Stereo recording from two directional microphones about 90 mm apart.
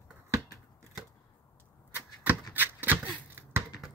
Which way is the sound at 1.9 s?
20° right (ahead or behind).